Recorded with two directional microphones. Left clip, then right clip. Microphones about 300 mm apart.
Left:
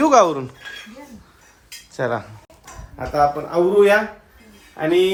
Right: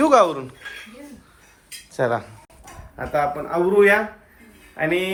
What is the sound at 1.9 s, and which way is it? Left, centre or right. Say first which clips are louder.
Speech: right 1 dB; centre.